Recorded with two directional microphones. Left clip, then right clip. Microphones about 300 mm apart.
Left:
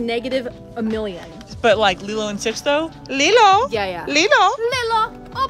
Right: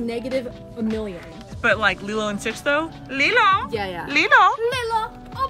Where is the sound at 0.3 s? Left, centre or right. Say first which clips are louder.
Left 3 dB; centre.